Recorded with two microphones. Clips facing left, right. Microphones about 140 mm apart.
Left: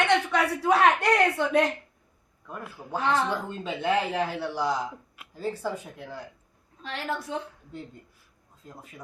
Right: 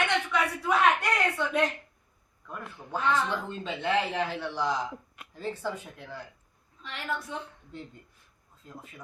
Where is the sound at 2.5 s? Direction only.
5° left (ahead or behind).